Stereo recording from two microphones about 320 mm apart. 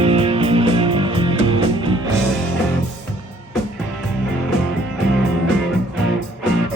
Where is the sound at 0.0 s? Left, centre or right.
Centre.